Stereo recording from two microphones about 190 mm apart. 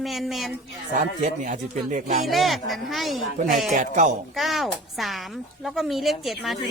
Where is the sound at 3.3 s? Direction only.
40° right (ahead or behind).